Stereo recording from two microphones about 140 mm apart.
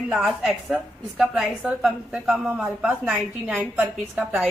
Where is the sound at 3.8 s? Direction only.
Centre (ahead or behind).